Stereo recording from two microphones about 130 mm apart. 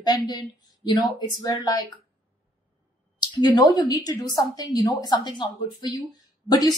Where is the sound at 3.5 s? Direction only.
30° left (ahead or behind).